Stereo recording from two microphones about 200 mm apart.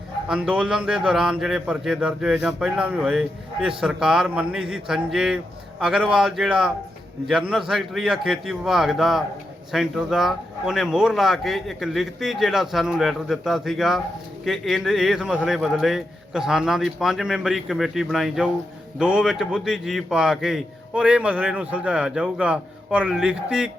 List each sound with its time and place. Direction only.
0.3 s a man's voice: 5° right (ahead or behind)